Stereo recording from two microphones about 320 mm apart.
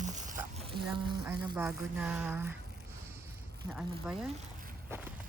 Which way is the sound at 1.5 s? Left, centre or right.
Centre.